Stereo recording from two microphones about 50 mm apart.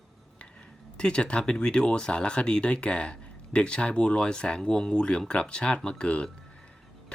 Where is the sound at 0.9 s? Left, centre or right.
Centre.